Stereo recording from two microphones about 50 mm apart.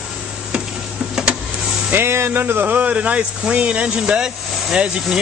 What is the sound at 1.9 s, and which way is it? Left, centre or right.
Speech, right.